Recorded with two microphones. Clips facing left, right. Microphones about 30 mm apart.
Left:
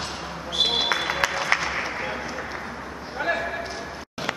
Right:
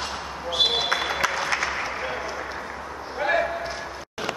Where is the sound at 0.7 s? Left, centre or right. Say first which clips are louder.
Even; centre.